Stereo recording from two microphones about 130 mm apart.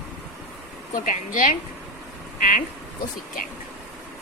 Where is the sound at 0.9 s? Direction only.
90° left.